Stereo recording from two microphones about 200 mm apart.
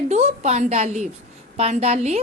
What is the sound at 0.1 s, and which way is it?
A woman's voice, 35° right (ahead or behind).